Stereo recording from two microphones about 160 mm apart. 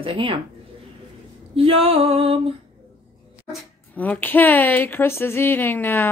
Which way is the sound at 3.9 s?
10° left (ahead or behind).